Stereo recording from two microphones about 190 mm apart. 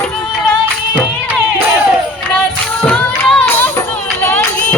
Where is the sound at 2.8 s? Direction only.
5° left (ahead or behind).